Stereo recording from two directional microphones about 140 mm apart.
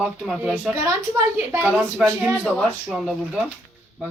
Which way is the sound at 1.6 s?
5° right (ahead or behind).